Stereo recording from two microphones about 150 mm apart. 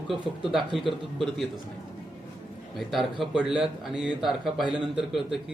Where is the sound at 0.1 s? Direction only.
Centre (ahead or behind).